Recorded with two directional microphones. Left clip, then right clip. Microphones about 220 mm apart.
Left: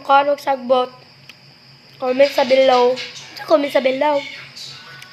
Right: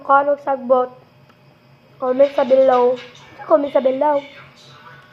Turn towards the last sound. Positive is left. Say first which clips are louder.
# even
turn(degrees=20)  # may be behind; listen again after turning